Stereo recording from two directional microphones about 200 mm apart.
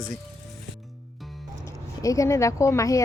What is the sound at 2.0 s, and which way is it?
Speech, 15° left (ahead or behind).